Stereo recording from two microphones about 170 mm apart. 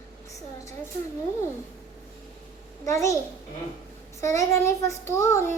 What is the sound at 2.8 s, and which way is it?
Child singing, 20° left (ahead or behind).